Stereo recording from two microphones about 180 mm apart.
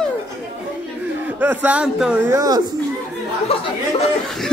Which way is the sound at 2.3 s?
20° right (ahead or behind).